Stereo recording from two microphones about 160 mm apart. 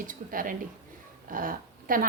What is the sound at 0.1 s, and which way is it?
A woman's voice, 60° right (ahead or behind).